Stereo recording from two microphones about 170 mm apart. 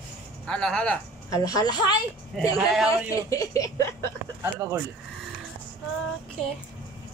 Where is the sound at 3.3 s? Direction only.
20° left (ahead or behind).